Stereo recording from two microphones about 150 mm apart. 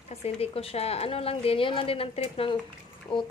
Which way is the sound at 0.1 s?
40° left (ahead or behind).